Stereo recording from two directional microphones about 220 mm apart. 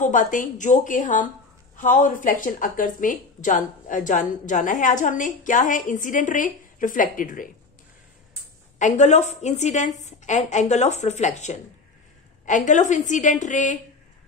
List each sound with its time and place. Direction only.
0.0 s a woman's voice: 35° left (ahead or behind)
8.7 s a woman's voice: 30° left (ahead or behind)